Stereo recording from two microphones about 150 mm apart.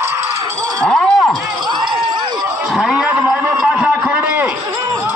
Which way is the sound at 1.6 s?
30° right (ahead or behind).